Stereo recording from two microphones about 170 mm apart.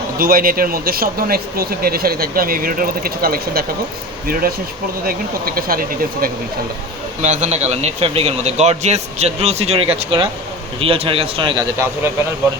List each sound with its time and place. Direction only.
0.2 s speech: 60° right (ahead or behind)
7.2 s speech: 45° right (ahead or behind)